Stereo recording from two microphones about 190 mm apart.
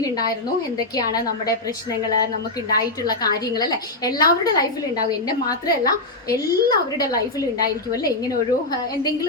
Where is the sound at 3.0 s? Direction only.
20° left (ahead or behind).